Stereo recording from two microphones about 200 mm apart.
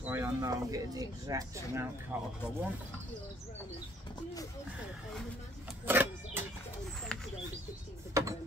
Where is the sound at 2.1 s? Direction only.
10° right (ahead or behind).